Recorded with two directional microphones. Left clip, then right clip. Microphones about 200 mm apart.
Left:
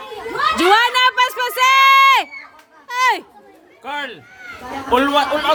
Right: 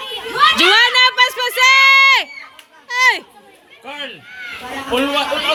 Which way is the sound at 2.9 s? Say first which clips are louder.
Right 3 dB; 10° left (ahead or behind).